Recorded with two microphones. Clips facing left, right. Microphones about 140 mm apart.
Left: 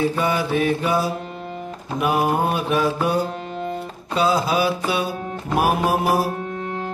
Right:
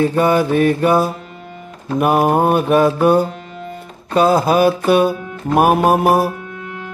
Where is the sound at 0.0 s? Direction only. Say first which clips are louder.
Right 7 dB; 50° right (ahead or behind).